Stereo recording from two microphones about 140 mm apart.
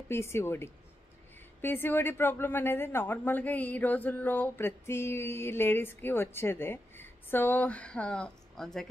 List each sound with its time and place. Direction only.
0.1 s speech: 20° left (ahead or behind)